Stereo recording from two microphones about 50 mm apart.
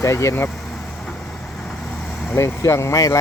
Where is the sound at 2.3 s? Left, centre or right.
Left.